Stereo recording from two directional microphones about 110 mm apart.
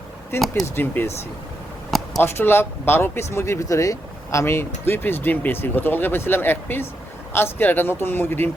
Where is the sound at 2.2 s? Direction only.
20° left (ahead or behind).